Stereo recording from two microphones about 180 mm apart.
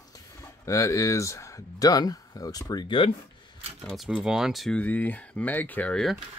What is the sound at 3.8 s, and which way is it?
Speech, centre (ahead or behind).